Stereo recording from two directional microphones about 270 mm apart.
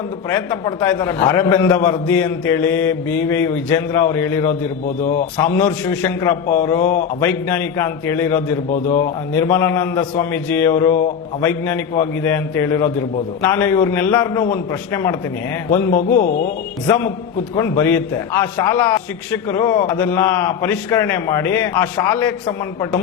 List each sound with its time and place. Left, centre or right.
0.3 s a man's voice: centre
5.5 s a man's voice: centre
16.0 s a man's voice: left
16.8 s a man's voice: centre